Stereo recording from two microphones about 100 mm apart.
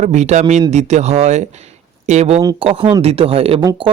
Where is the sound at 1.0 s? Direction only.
90° right.